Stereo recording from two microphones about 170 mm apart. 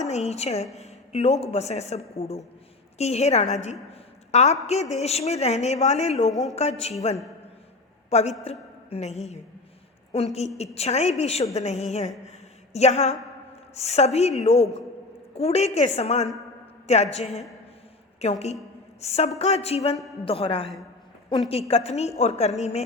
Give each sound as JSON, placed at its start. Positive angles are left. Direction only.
{"t": 0.0, "sound": "a woman's voice", "side_deg": 40}
{"t": 8.1, "sound": "a woman's voice", "side_deg": 40}
{"t": 21.8, "sound": "a woman's voice", "side_deg": 40}